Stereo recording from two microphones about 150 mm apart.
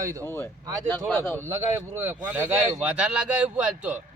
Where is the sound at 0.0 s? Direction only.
20° right (ahead or behind).